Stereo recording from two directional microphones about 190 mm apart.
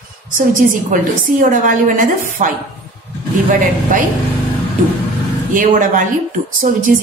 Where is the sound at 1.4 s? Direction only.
45° right (ahead or behind).